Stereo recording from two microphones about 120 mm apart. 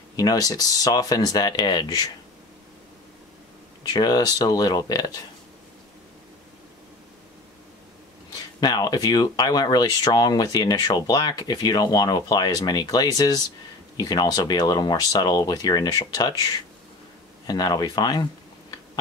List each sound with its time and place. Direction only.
0.1 s speech: 30° left (ahead or behind)
3.9 s speech: 35° left (ahead or behind)
8.5 s speech: 35° left (ahead or behind)